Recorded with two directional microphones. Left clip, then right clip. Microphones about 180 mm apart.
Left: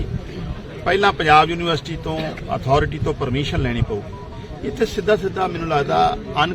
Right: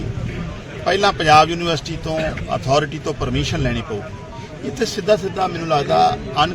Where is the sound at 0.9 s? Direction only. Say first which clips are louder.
Right 1 dB; 15° right (ahead or behind).